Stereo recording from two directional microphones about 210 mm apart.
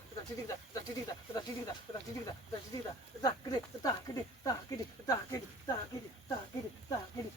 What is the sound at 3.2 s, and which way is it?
Speech, 20° left (ahead or behind).